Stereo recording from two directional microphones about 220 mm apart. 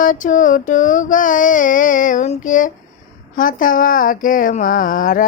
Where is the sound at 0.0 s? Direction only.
35° left (ahead or behind).